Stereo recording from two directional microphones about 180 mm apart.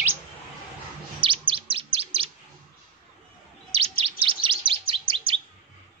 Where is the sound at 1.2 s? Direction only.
30° right (ahead or behind).